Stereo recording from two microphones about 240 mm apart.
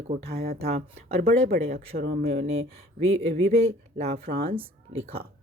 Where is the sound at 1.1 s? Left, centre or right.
Right.